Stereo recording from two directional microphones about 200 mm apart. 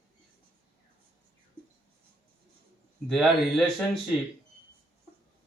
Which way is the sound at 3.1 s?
Centre (ahead or behind).